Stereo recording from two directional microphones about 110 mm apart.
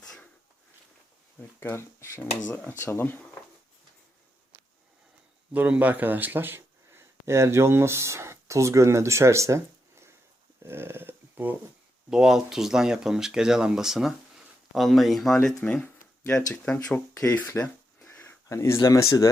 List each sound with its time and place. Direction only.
0.0 s a sound: 5° left (ahead or behind)
1.4 s speech: 20° left (ahead or behind)
5.5 s speech: 15° right (ahead or behind)
10.6 s a sound: 20° right (ahead or behind)
12.1 s speech: 5° right (ahead or behind)
15.6 s speech: 15° left (ahead or behind)
16.2 s speech: 25° left (ahead or behind)
16.6 s speech: 10° left (ahead or behind); by 19.3 s 30° left (ahead or behind)